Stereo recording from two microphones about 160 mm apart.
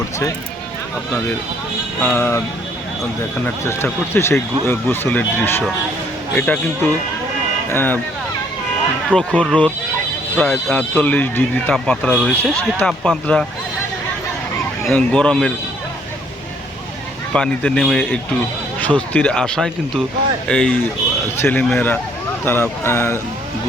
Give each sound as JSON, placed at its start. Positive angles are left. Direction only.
{"t": 2.0, "sound": "speech", "side_deg": 10}
{"t": 7.7, "sound": "speech", "side_deg": 10}
{"t": 9.0, "sound": "speech", "side_deg": 5}
{"t": 14.8, "sound": "speech", "side_deg": 5}
{"t": 17.3, "sound": "speech", "side_deg": 5}